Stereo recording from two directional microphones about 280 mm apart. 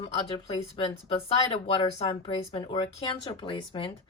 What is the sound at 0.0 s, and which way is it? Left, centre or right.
Speech, left.